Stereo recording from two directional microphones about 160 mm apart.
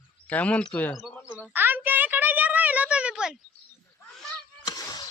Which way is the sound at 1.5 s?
10° right (ahead or behind).